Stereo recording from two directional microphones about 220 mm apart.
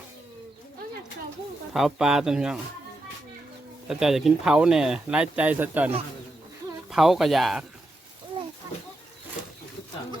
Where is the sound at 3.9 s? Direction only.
Centre (ahead or behind).